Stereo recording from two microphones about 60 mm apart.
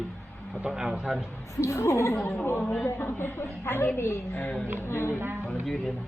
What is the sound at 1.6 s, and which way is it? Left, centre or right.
A woman's voice, left.